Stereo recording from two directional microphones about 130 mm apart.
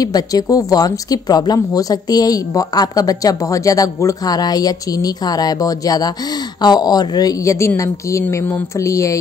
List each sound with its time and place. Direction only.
0.0 s speech: 30° left (ahead or behind)